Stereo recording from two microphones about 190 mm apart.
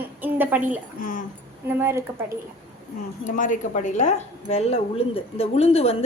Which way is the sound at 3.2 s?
45° left (ahead or behind).